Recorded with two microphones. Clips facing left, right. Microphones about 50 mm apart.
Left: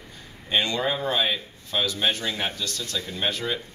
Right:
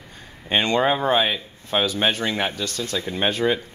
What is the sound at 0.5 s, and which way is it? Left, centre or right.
Speech, right.